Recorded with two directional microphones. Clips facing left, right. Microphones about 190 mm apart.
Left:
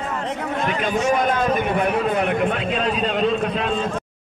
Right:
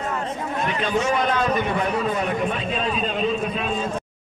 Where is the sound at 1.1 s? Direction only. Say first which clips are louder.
Left 2 dB; 45° left (ahead or behind); by 3.7 s 75° left (ahead or behind).